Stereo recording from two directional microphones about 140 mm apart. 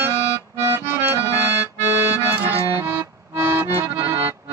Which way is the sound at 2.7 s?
15° right (ahead or behind).